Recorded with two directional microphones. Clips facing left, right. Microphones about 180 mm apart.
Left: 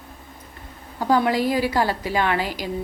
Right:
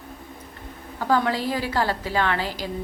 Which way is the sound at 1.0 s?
15° left (ahead or behind).